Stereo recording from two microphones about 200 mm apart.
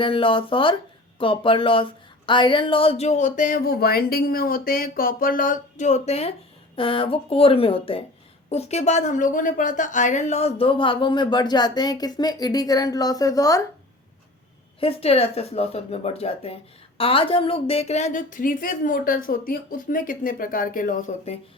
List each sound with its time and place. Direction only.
0.0 s speech: 25° left (ahead or behind)
14.8 s a woman's voice: 30° left (ahead or behind)